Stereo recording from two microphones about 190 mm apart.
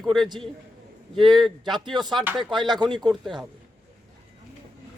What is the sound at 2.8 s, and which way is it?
Speech, 20° right (ahead or behind).